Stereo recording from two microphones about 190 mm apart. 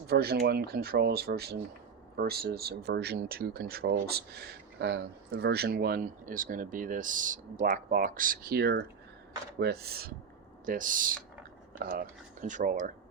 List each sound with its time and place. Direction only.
0.1 s speech: 55° right (ahead or behind)